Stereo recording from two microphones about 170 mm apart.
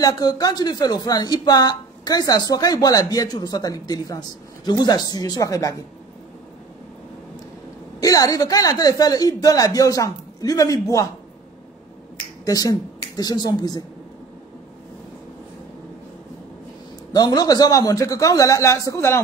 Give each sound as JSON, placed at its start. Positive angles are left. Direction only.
{"t": 0.0, "sound": "speech", "side_deg": 20}
{"t": 8.0, "sound": "speech", "side_deg": 20}
{"t": 12.4, "sound": "speech", "side_deg": 20}
{"t": 17.1, "sound": "speech", "side_deg": 25}